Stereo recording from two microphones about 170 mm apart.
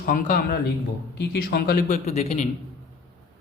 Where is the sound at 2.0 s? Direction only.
40° left (ahead or behind).